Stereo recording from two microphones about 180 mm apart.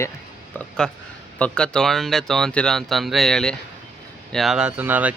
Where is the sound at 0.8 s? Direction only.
5° left (ahead or behind).